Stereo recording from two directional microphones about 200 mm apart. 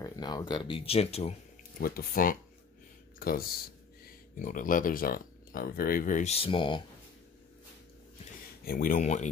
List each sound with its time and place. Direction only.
0.0 s speech: 20° left (ahead or behind)
1.8 s speech: 50° left (ahead or behind); by 6.8 s 25° left (ahead or behind)
8.6 s speech: 45° left (ahead or behind)